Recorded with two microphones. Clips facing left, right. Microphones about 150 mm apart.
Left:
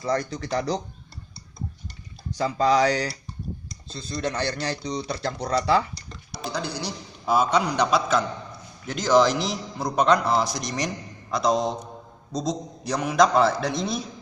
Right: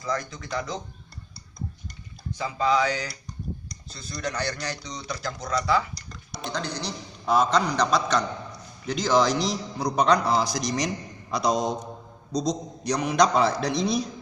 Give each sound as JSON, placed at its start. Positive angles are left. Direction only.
{"t": 0.0, "sound": "speech", "side_deg": 35}
{"t": 2.4, "sound": "speech", "side_deg": 40}
{"t": 3.8, "sound": "speech", "side_deg": 25}
{"t": 6.3, "sound": "a man's voice", "side_deg": 5}